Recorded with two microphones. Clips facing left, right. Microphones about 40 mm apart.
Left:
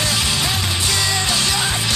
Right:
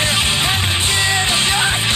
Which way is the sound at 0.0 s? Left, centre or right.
Right.